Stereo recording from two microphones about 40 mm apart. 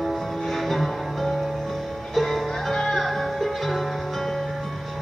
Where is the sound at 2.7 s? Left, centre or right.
Centre.